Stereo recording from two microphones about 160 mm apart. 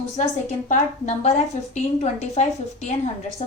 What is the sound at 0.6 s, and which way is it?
A woman's voice, 45° left (ahead or behind).